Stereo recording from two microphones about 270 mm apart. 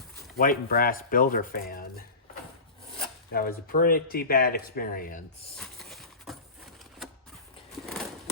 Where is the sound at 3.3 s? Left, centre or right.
Left.